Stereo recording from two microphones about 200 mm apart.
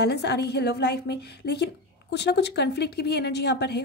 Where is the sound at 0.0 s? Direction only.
55° left (ahead or behind).